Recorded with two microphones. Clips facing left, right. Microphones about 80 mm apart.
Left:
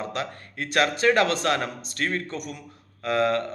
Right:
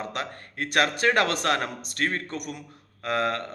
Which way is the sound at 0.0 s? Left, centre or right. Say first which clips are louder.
Left 2 dB; right.